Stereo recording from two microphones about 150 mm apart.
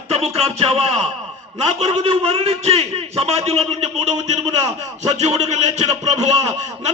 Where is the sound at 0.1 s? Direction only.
45° right (ahead or behind).